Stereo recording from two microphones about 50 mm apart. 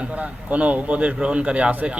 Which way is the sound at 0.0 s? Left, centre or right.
Right.